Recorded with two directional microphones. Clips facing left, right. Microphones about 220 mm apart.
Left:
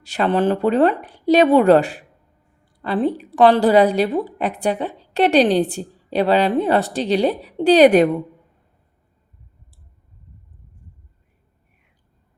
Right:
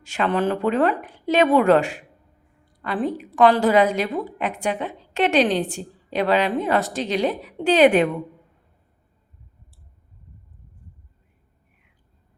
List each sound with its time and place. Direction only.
0.0 s a woman's voice: 35° left (ahead or behind)